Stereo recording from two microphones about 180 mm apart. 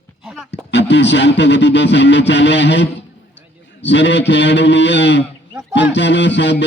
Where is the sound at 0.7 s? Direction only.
75° left (ahead or behind).